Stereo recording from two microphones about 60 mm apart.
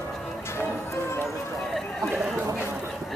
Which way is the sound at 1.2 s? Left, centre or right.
Centre.